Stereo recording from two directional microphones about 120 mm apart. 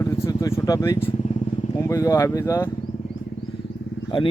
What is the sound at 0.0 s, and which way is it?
Vehicle, 25° left (ahead or behind).